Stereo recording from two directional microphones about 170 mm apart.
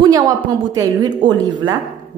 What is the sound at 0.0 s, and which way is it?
A woman's voice, 20° right (ahead or behind).